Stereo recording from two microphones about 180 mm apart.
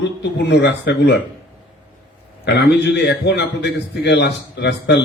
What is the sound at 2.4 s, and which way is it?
A man's voice, 65° left (ahead or behind).